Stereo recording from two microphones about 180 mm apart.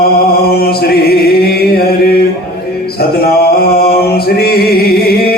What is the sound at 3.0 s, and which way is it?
Mantra, 55° left (ahead or behind).